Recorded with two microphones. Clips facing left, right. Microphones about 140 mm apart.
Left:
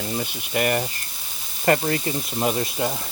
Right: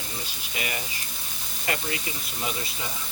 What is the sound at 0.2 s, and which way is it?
Speech, 55° left (ahead or behind).